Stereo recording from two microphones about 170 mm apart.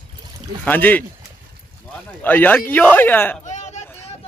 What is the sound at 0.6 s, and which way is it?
Speech, 10° left (ahead or behind).